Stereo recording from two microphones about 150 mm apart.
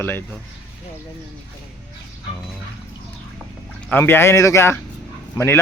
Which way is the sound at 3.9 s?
15° left (ahead or behind).